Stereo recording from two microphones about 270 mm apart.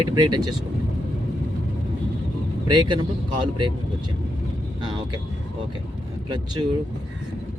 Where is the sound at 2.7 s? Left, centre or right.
Centre.